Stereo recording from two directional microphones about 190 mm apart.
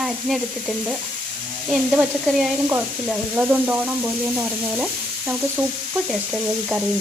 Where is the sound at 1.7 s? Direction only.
5° right (ahead or behind).